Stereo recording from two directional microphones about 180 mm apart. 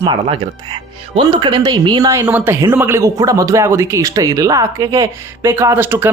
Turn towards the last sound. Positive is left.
turn(degrees=-10)  # may be behind; listen again after turning